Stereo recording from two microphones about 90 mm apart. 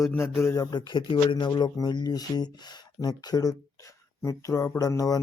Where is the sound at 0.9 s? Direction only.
65° left (ahead or behind).